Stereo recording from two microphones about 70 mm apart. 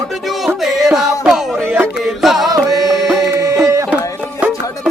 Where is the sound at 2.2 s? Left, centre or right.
Centre.